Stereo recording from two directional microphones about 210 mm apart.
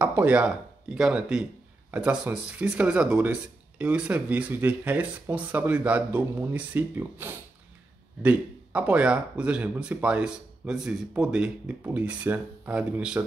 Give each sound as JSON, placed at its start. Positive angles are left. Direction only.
{"t": 0.0, "sound": "speech", "side_deg": -10}